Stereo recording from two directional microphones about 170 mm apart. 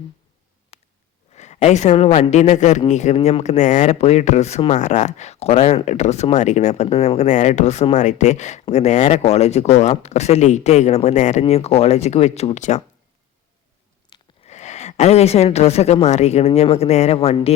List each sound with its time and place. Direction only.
0.7 s a sound: 35° left (ahead or behind)
1.4 s speech: 40° left (ahead or behind)
14.1 s speech: 40° left (ahead or behind)